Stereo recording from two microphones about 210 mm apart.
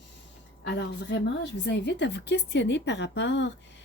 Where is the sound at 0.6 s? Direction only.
55° left (ahead or behind).